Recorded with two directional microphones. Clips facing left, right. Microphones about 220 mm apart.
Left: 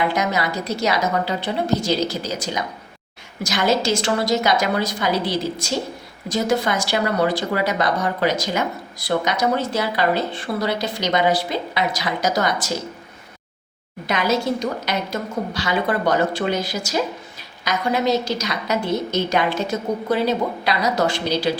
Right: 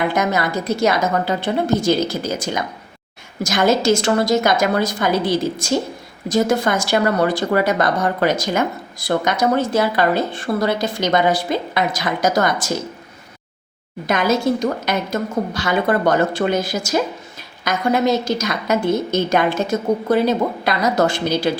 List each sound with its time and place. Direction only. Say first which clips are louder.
0.1 s speech: right 3 dB; 50° right (ahead or behind)
14.1 s speech: right 3 dB; 50° right (ahead or behind)